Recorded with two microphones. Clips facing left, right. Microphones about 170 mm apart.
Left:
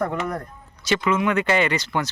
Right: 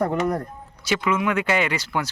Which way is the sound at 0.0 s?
35° right (ahead or behind).